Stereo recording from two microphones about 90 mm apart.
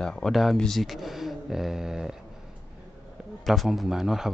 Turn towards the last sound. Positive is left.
turn(degrees=-5)  # may be behind; listen again after turning